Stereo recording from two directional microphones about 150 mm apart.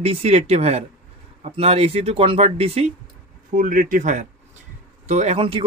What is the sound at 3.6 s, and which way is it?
Speech, 65° right (ahead or behind).